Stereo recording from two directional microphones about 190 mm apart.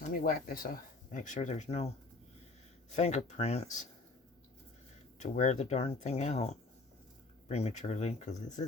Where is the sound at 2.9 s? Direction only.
35° left (ahead or behind).